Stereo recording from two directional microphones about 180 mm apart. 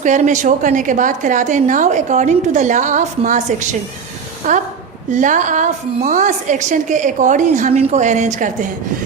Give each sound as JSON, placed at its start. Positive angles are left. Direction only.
{"t": 0.0, "sound": "a woman's voice", "side_deg": -40}